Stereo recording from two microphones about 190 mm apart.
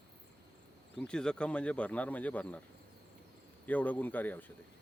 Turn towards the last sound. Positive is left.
turn(degrees=10)  # may be behind; listen again after turning